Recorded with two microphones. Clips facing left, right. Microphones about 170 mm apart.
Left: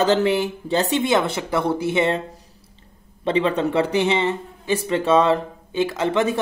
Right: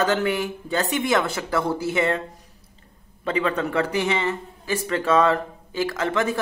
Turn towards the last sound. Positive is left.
turn(degrees=20)  # may be behind; listen again after turning